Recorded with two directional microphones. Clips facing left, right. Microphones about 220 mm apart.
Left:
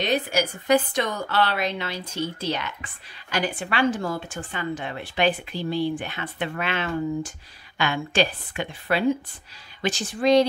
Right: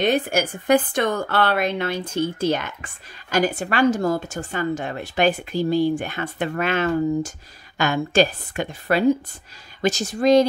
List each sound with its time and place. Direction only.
0.0 s a woman's voice: 50° right (ahead or behind)